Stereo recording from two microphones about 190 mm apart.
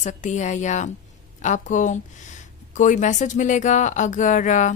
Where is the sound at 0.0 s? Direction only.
40° left (ahead or behind).